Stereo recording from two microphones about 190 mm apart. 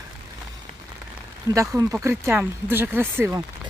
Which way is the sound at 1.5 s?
15° right (ahead or behind).